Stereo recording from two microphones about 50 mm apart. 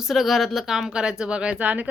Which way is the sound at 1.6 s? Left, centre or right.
Right.